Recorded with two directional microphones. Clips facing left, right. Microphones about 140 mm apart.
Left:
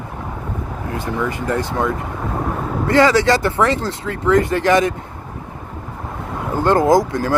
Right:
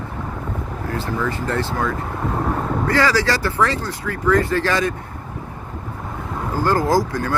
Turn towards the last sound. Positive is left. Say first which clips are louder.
# left 4 dB
turn(degrees=25)  # may be behind; listen again after turning